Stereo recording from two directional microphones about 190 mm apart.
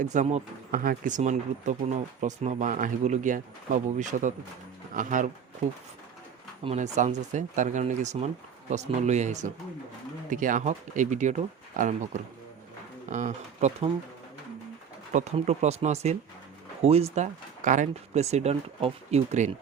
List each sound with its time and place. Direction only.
0.0 s speech: 40° right (ahead or behind)
6.7 s speech: 35° right (ahead or behind)
15.1 s speech: 35° right (ahead or behind)